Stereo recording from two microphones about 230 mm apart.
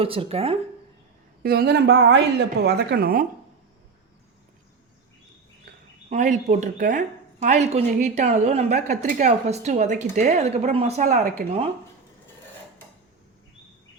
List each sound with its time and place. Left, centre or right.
0.0 s a woman's voice: right
1.4 s speech: right
6.1 s a woman's voice: right